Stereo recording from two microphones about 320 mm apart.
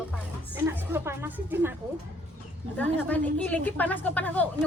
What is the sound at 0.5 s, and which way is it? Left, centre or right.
Speech, centre.